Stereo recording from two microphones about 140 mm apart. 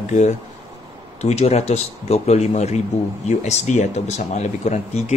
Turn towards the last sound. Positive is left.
turn(degrees=55)  # may be behind; listen again after turning